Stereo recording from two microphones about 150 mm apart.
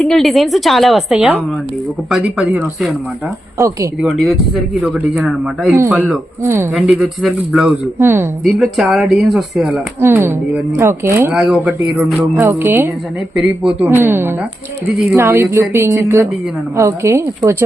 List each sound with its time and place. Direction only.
0.0 s a woman's voice: centre (ahead or behind)
4.0 s a woman's voice: centre (ahead or behind)
6.0 s speech: 15° right (ahead or behind)
6.7 s a woman's voice: 5° right (ahead or behind)
7.9 s speech: 15° right (ahead or behind)
8.4 s a woman's voice: centre (ahead or behind)
10.0 s speech: 15° right (ahead or behind)
12.3 s a woman's voice: 15° right (ahead or behind)